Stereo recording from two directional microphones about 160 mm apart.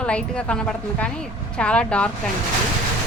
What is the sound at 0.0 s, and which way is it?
A woman's voice, 5° left (ahead or behind).